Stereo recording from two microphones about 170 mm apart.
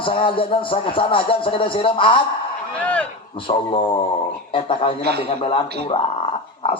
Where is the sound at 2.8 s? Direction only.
5° left (ahead or behind).